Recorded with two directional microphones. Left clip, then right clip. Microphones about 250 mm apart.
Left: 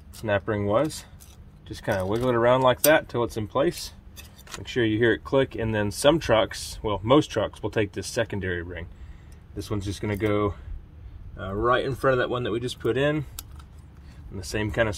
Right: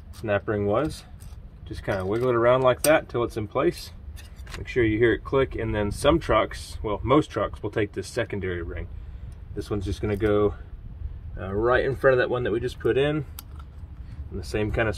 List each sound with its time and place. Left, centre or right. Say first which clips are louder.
0.3 s speech: even; left
4.6 s speech: right 1 dB; left